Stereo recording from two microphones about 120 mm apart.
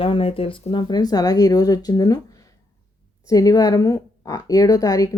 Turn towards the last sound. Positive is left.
turn(degrees=25)  # may be behind; listen again after turning